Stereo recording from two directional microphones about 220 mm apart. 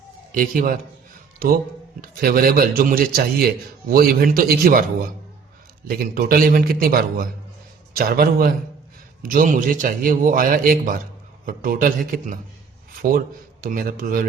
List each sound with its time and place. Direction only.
0.3 s a man's voice: 40° right (ahead or behind)
2.0 s a man's voice: 45° right (ahead or behind)
6.1 s a man's voice: 40° right (ahead or behind)